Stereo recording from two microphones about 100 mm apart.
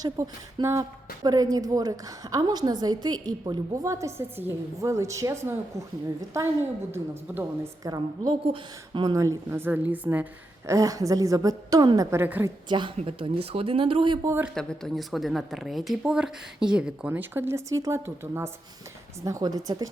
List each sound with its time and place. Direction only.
0.0 s speech: 30° right (ahead or behind)
7.9 s speech: 40° right (ahead or behind)
8.9 s speech: 55° right (ahead or behind)
9.1 s speech: 30° right (ahead or behind)
10.7 s speech: 35° right (ahead or behind)
12.1 s speech: 20° right (ahead or behind)
12.6 s a woman's voice: 50° right (ahead or behind)
13.0 s speech: 65° right (ahead or behind)
14.5 s speech: 5° left (ahead or behind); by 17.1 s 10° right (ahead or behind)
17.1 s speech: 20° right (ahead or behind)
19.2 s speech: 35° right (ahead or behind)